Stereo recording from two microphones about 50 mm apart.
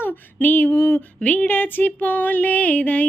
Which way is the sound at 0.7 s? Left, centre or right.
Left.